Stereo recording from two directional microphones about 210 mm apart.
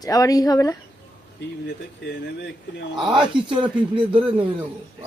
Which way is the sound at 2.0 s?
55° left (ahead or behind).